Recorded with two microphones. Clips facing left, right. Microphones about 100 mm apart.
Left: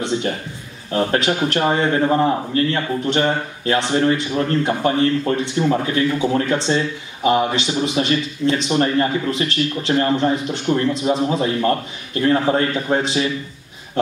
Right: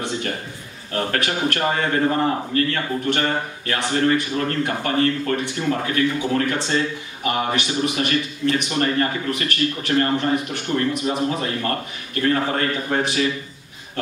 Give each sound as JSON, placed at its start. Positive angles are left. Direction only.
{"t": 0.9, "sound": "a man's voice", "side_deg": 20}